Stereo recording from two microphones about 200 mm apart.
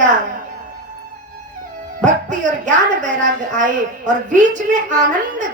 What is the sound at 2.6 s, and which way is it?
A woman's voice, 40° right (ahead or behind).